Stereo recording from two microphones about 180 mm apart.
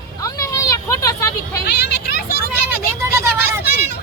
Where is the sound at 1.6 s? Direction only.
65° left (ahead or behind).